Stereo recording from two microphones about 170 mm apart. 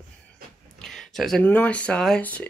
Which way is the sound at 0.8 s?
Centre (ahead or behind).